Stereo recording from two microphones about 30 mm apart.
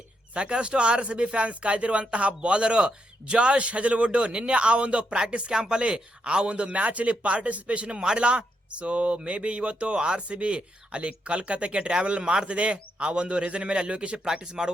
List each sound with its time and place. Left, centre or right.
0.3 s speech: right
5.5 s speech: right
7.9 s a man's voice: right
12.5 s speech: right
14.6 s a man's voice: right